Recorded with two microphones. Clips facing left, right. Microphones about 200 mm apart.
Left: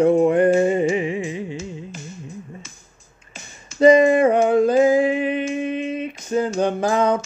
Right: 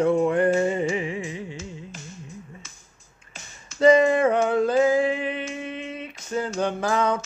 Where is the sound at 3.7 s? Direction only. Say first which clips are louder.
Left 4 dB; 15° left (ahead or behind).